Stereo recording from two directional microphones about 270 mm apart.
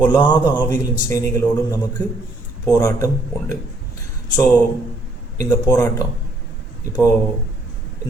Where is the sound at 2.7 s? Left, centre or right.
Centre.